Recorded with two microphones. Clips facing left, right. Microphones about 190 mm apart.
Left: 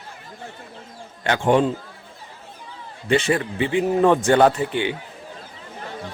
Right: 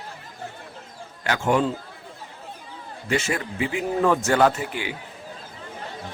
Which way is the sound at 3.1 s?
30° left (ahead or behind).